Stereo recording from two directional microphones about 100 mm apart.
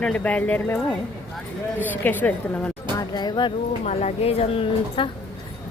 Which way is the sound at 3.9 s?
90° left.